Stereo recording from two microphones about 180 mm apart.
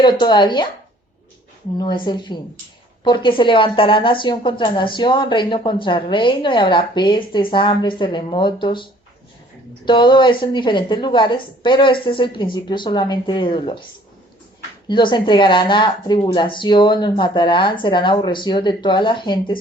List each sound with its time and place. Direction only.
0.0 s a woman's voice: 25° left (ahead or behind)
1.8 s a woman's voice: 25° left (ahead or behind)
14.8 s a woman's voice: 25° left (ahead or behind)